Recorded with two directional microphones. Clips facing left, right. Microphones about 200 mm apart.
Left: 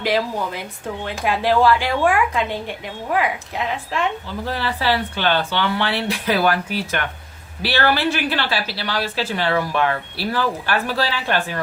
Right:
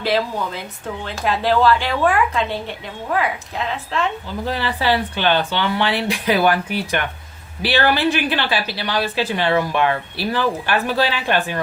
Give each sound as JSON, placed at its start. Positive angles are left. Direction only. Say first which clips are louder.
{"t": 0.0, "sound": "speech", "louder": "even", "side_deg": 15}
{"t": 4.4, "sound": "a woman's voice", "louder": "right 2 dB", "side_deg": -15}